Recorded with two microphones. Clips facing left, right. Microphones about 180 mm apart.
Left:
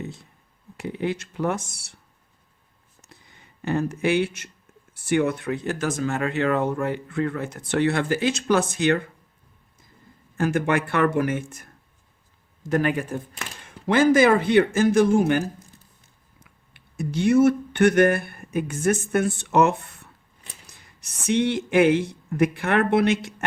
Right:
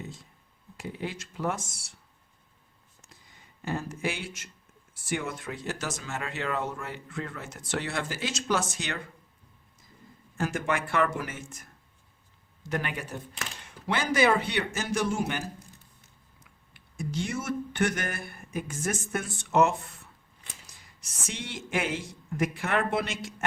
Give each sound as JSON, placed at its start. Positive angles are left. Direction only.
{"t": 0.8, "sound": "speech", "side_deg": 65}
{"t": 3.6, "sound": "speech", "side_deg": 65}
{"t": 10.3, "sound": "speech", "side_deg": 60}
{"t": 12.6, "sound": "speech", "side_deg": 45}